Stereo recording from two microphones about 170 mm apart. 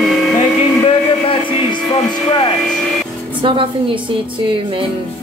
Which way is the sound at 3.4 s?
30° right (ahead or behind).